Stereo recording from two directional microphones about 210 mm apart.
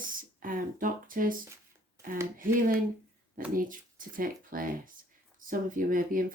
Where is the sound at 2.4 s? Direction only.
40° right (ahead or behind).